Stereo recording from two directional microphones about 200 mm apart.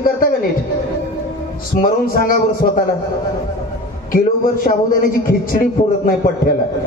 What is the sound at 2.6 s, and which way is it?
Speech, 45° left (ahead or behind).